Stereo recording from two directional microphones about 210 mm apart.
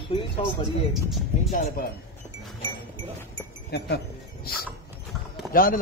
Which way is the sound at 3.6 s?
55° left (ahead or behind).